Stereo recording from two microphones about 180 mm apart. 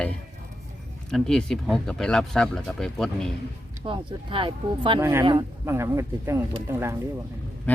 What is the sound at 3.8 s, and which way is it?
Speech, 30° right (ahead or behind).